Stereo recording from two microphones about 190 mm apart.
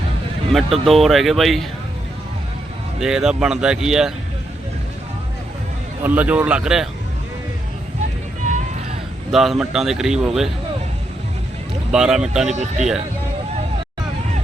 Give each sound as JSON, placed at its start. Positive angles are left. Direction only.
{"t": 0.5, "sound": "speech", "side_deg": 0}
{"t": 3.0, "sound": "speech", "side_deg": -5}
{"t": 6.0, "sound": "speech", "side_deg": -10}
{"t": 9.3, "sound": "speech", "side_deg": 0}
{"t": 11.9, "sound": "speech", "side_deg": -5}
{"t": 12.5, "sound": "speech", "side_deg": -40}